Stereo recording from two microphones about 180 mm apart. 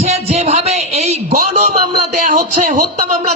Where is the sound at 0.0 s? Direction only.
35° right (ahead or behind).